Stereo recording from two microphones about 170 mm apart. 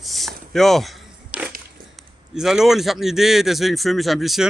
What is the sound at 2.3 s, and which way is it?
A man's voice, 5° right (ahead or behind).